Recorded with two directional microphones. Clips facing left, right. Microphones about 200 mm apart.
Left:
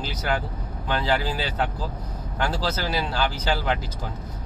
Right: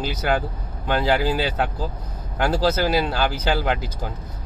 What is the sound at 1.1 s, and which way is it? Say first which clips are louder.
Speech: right 4 dB; 55° right (ahead or behind).